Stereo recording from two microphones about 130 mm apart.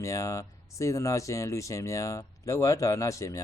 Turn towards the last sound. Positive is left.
turn(degrees=25)  # may be behind; listen again after turning